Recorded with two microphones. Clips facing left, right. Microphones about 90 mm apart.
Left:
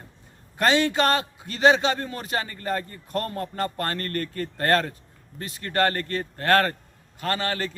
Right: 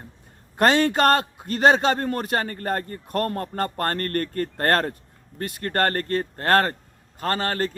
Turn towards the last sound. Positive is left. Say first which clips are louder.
# right 2 dB
turn(degrees=-40)  # may be behind; listen again after turning